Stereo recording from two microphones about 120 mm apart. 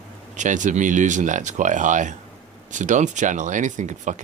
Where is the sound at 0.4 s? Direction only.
90° right.